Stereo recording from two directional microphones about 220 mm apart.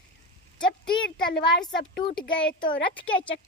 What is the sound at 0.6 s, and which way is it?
Speech, 5° left (ahead or behind).